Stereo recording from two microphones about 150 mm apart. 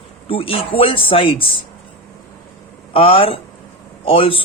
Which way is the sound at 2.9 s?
40° left (ahead or behind).